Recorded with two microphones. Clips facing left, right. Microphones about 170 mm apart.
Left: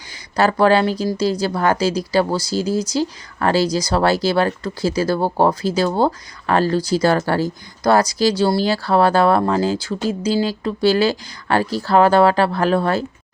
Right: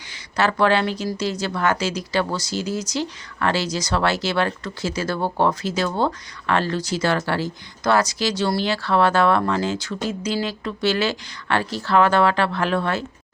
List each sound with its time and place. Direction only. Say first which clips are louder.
0.3 s speech: left 4 dB; 35° left (ahead or behind)